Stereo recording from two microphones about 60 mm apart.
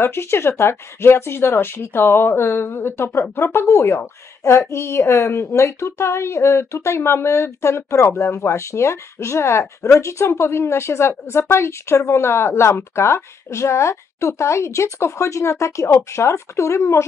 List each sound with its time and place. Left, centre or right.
0.0 s speech: left